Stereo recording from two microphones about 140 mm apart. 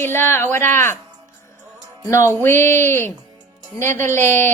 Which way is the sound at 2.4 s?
15° left (ahead or behind).